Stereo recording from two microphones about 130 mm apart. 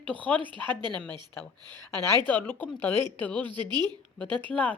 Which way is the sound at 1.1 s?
35° right (ahead or behind).